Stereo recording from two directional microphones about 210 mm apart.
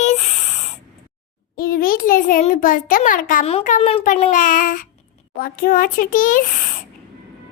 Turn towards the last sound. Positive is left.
turn(degrees=40)  # may be behind; listen again after turning